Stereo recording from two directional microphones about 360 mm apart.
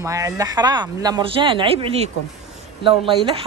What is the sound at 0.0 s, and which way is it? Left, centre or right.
Speech, centre.